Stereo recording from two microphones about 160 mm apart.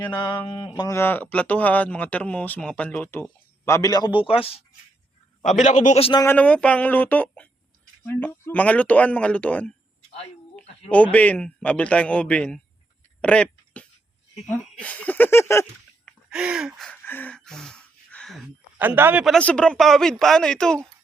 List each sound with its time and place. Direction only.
0.2 s mantra: 25° left (ahead or behind)
0.8 s speech: 15° left (ahead or behind); by 4.6 s 35° left (ahead or behind)
5.4 s a man's voice: 50° left (ahead or behind)
6.0 s speech: 35° left (ahead or behind)
6.2 s speech: 10° left (ahead or behind)
10.8 s speech: 10° left (ahead or behind)
13.2 s a sound: 5° left (ahead or behind)
14.4 s speech: 5° left (ahead or behind)
16.3 s speech: 5° right (ahead or behind)
17.0 s a sound: 10° left (ahead or behind)
18.8 s a man's voice: 15° right (ahead or behind)
19.2 s speech: 5° left (ahead or behind)